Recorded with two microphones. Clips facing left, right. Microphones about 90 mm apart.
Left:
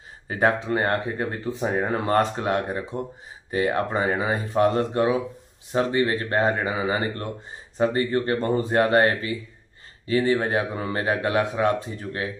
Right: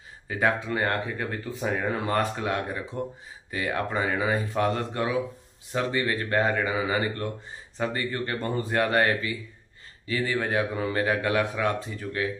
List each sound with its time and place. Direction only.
0.3 s speech: 35° left (ahead or behind)